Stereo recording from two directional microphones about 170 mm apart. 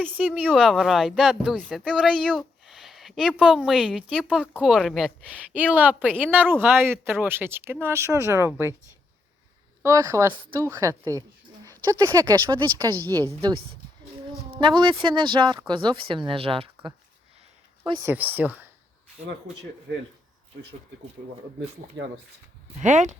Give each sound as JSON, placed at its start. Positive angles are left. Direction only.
{"t": 0.0, "sound": "speech", "side_deg": -10}
{"t": 9.8, "sound": "speech", "side_deg": -20}
{"t": 14.6, "sound": "speech", "side_deg": -25}
{"t": 18.0, "sound": "speech", "side_deg": -10}
{"t": 22.0, "sound": "speech", "side_deg": -90}
{"t": 22.8, "sound": "speech", "side_deg": -45}